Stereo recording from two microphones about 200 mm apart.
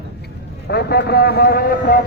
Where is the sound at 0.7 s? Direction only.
55° left (ahead or behind).